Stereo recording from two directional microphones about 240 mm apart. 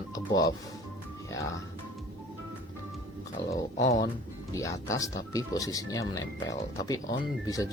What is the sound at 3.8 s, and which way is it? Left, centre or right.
Speech, left.